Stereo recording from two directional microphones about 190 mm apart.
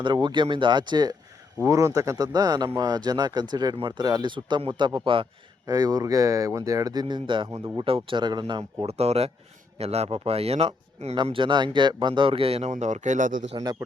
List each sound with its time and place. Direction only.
0.0 s speech: 25° right (ahead or behind); by 13.4 s 40° right (ahead or behind)